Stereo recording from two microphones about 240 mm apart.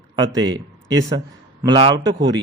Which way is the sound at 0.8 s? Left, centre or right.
Centre.